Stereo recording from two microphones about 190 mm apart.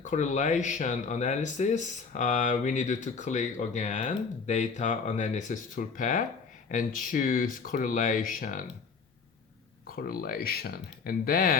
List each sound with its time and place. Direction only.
0.0 s speech: 40° left (ahead or behind)
9.9 s speech: 50° left (ahead or behind)